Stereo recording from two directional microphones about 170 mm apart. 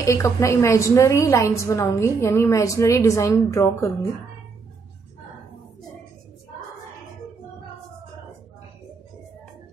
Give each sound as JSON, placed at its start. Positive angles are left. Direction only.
{"t": 0.0, "sound": "a woman's voice", "side_deg": 20}